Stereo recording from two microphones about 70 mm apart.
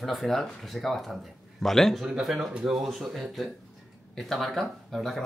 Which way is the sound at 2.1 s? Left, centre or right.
Centre.